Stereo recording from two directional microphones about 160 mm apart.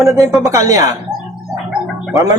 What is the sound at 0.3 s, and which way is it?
Speech, centre (ahead or behind).